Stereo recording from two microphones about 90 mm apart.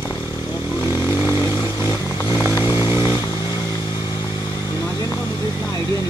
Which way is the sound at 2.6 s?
30° right (ahead or behind).